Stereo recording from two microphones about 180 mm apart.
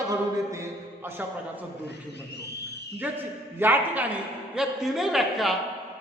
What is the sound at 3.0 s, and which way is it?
A man's voice, 10° right (ahead or behind).